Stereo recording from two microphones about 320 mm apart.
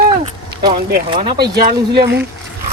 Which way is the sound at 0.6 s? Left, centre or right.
Right.